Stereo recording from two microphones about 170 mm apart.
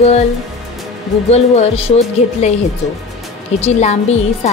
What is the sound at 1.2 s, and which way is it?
Speech, 40° left (ahead or behind).